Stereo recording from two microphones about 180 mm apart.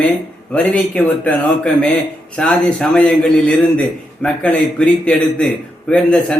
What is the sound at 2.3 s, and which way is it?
A man's voice, 5° left (ahead or behind).